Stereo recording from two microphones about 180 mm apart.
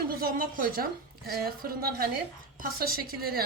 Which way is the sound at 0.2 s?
50° right (ahead or behind).